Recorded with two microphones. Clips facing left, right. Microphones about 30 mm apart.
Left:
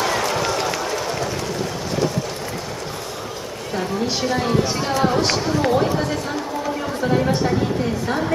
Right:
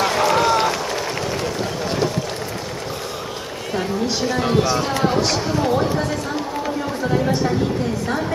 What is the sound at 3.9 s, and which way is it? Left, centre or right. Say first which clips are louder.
A woman's voice: left 1 dB; centre.